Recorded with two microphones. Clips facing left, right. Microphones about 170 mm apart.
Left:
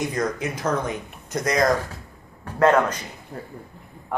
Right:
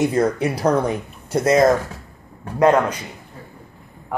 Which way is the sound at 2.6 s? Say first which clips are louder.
Right 2 dB; 10° right (ahead or behind).